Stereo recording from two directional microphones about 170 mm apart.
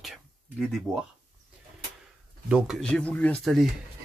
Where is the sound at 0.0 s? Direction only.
Centre (ahead or behind).